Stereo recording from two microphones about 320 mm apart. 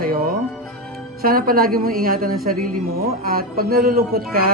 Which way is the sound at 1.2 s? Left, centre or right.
Right.